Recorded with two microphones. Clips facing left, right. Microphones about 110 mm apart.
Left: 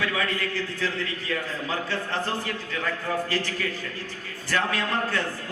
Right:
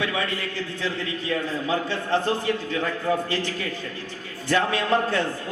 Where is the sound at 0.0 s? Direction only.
20° right (ahead or behind).